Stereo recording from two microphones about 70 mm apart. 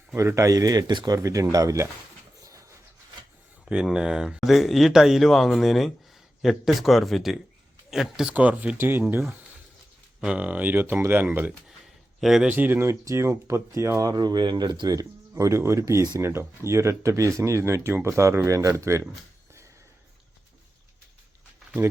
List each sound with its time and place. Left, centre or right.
0.1 s speech: right
1.2 s speech: right
2.4 s a sound: right
3.7 s speech: centre
8.3 s speech: centre
10.2 s speech: centre
12.2 s speech: centre
12.5 s speech: right
14.1 s speech: right